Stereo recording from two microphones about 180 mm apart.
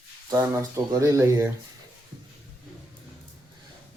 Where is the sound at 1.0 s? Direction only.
15° right (ahead or behind).